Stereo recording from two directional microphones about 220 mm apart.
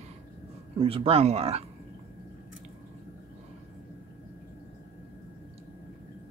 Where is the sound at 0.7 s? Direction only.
25° right (ahead or behind).